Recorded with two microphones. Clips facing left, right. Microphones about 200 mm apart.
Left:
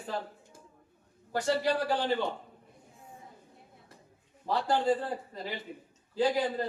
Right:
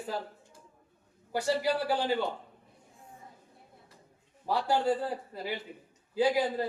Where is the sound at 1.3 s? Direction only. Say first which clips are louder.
Even; 10° right (ahead or behind).